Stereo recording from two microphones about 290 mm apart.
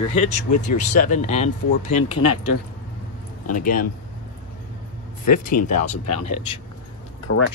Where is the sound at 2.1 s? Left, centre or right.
Left.